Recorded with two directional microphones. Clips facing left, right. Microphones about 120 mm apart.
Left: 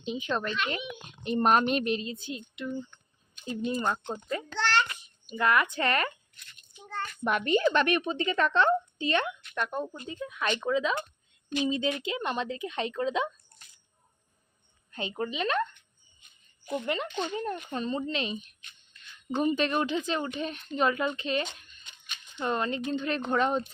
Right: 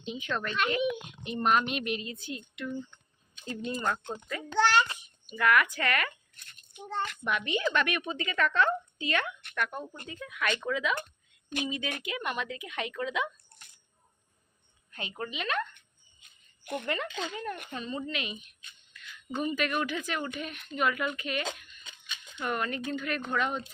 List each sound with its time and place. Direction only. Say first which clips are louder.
0.0 s speech: left 3 dB; 20° left (ahead or behind)
1.2 s a woman's voice: left 4 dB; 40° left (ahead or behind); by 4.2 s 20° left (ahead or behind)
4.5 s a sound: right 4 dB; 10° right (ahead or behind)
5.3 s speech: even; 25° left (ahead or behind)
6.3 s rattle: right 4 dB; 45° right (ahead or behind)
7.3 s a woman's voice: left 7 dB; 40° left (ahead or behind)
14.9 s a woman's voice: left 5 dB; 30° left (ahead or behind)
16.8 s speech: left 2 dB; 20° left (ahead or behind)
17.7 s a woman's voice: left 5 dB; 35° left (ahead or behind)